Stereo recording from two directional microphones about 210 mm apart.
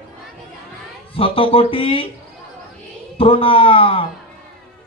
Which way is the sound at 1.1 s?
25° left (ahead or behind).